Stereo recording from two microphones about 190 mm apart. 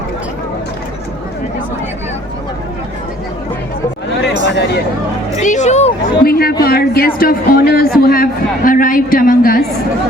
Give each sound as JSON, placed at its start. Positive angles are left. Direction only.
{"t": 4.2, "sound": "a sound", "side_deg": 60}
{"t": 5.4, "sound": "speech", "side_deg": 40}
{"t": 6.2, "sound": "speech", "side_deg": 55}